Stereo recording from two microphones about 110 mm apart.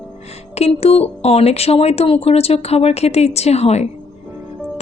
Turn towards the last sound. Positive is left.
turn(degrees=75)  # may be behind; listen again after turning